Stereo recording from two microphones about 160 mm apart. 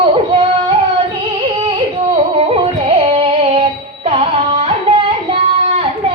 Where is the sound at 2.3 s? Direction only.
35° right (ahead or behind).